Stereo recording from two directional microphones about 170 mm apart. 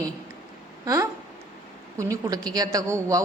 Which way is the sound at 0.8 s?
20° right (ahead or behind).